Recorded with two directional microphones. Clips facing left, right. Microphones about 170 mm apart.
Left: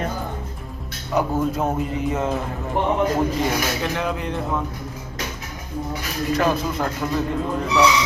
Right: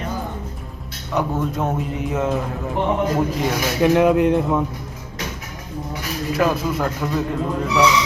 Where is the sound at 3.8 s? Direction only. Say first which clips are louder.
Right 10 dB; 10° right (ahead or behind).